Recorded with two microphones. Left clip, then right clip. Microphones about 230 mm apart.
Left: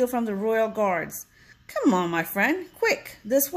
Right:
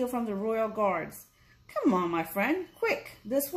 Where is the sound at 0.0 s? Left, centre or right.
Left.